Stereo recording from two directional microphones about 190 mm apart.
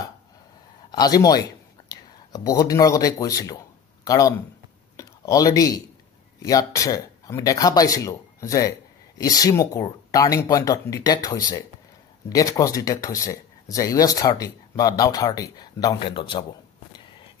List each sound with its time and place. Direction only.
0.9 s speech: 20° left (ahead or behind)
4.9 s a sound: 20° left (ahead or behind)
6.4 s speech: 15° left (ahead or behind)